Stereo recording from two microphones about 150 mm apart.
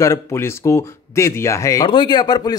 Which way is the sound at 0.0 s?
20° left (ahead or behind).